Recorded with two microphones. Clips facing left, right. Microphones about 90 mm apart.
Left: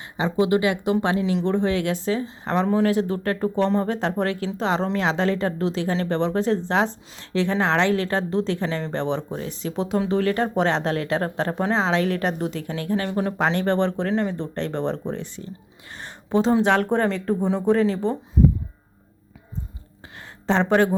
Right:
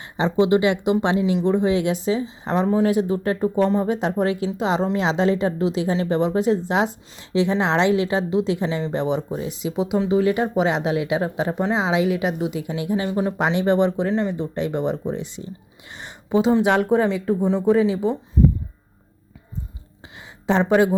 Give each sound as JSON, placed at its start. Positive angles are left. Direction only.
{"t": 0.2, "sound": "speech", "side_deg": -25}
{"t": 1.4, "sound": "speech", "side_deg": -15}
{"t": 20.5, "sound": "speech", "side_deg": -10}